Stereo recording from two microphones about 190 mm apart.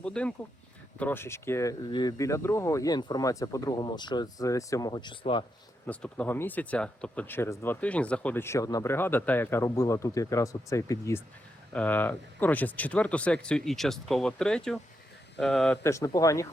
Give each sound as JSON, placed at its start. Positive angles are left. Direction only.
{"t": 0.0, "sound": "speech", "side_deg": 5}
{"t": 5.8, "sound": "speech", "side_deg": 5}